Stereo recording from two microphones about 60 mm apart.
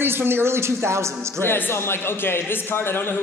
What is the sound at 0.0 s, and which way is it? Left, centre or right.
A woman's voice, right.